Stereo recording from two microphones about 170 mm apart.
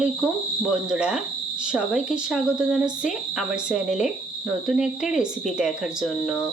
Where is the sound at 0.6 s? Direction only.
5° right (ahead or behind).